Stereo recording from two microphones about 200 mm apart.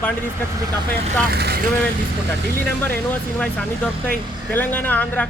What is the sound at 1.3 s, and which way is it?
Speech, 55° right (ahead or behind).